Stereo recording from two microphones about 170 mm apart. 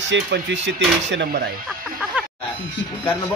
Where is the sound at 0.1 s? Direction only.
90° right.